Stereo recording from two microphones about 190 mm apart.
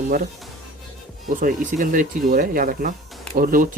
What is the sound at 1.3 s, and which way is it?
Speech, 45° right (ahead or behind).